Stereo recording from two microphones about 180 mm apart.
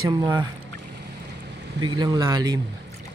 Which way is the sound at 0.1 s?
20° right (ahead or behind).